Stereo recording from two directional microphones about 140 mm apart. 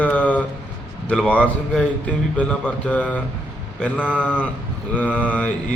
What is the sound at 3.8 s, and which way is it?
Mantra, 10° left (ahead or behind).